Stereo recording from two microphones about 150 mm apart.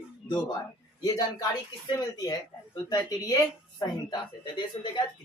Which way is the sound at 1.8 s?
25° left (ahead or behind).